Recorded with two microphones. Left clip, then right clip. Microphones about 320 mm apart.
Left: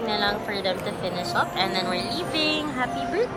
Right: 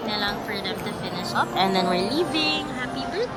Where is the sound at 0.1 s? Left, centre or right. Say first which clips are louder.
Left 2 dB; centre.